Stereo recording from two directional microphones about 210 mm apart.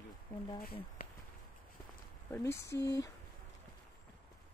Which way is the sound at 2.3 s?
10° left (ahead or behind).